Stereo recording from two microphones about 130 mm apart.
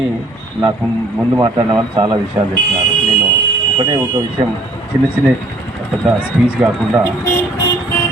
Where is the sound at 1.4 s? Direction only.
30° right (ahead or behind).